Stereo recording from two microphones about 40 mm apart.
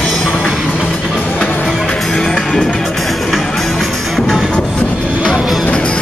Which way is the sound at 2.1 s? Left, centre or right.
Centre.